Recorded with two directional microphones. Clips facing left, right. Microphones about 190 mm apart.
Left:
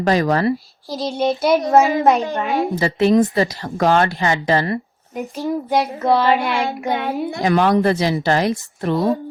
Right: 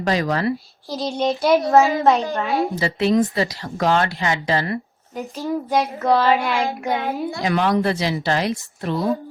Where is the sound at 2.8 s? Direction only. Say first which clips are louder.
Left 5 dB; 45° left (ahead or behind).